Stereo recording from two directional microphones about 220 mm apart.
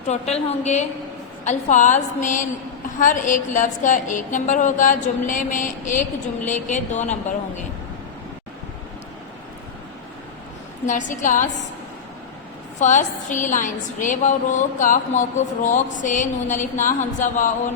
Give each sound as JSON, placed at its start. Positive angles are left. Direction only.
{"t": 0.1, "sound": "a woman's voice", "side_deg": 30}
{"t": 10.8, "sound": "a woman's voice", "side_deg": 35}
{"t": 12.8, "sound": "a woman's voice", "side_deg": 35}